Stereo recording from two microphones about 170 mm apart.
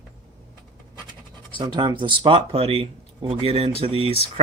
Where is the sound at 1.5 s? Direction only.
25° right (ahead or behind).